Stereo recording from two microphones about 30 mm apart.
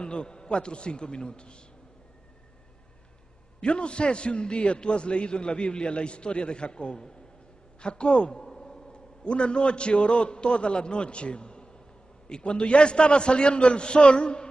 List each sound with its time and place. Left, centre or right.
0.0 s a man's voice: left
3.6 s a man's voice: left
8.5 s a sound: left
8.9 s a man's voice: left